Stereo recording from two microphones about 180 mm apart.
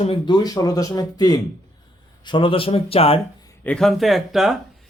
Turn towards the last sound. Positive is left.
turn(degrees=0)  # may be behind; listen again after turning